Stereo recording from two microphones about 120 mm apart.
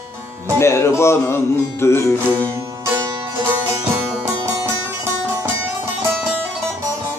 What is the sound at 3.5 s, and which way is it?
Music, 20° right (ahead or behind).